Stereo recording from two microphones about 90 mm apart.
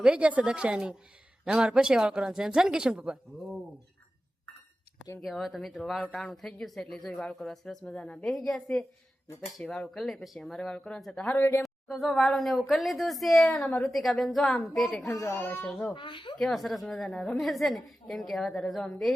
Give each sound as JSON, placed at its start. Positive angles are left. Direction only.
{"t": 0.0, "sound": "speech", "side_deg": -15}
{"t": 5.2, "sound": "speech", "side_deg": 0}
{"t": 7.1, "sound": "speech", "side_deg": 15}
{"t": 7.3, "sound": "speech", "side_deg": 0}
{"t": 11.3, "sound": "speech", "side_deg": 25}
{"t": 11.6, "sound": "speech", "side_deg": 0}
{"t": 13.9, "sound": "speech", "side_deg": 0}
{"t": 15.2, "sound": "speech", "side_deg": 30}
{"t": 15.4, "sound": "speech", "side_deg": 20}
{"t": 16.0, "sound": "speech", "side_deg": 65}
{"t": 16.4, "sound": "speech", "side_deg": 0}